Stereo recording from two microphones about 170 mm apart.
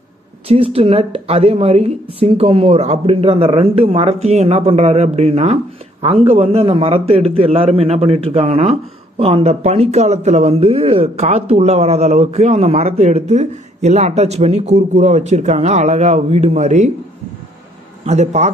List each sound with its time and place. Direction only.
0.5 s speech: 35° right (ahead or behind)
18.0 s speech: 40° right (ahead or behind)